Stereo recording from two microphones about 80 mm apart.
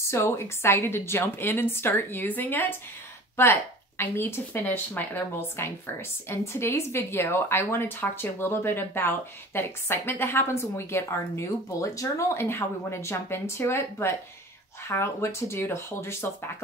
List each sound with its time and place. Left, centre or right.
0.1 s a woman's voice: left